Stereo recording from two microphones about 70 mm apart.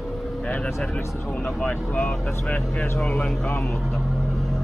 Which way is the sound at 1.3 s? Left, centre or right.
Centre.